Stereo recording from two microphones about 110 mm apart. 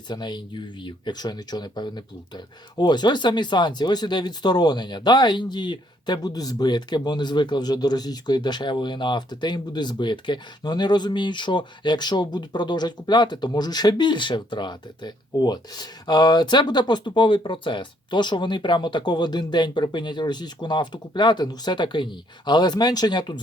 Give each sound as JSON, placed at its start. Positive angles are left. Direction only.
{"t": 0.1, "sound": "speech", "side_deg": 40}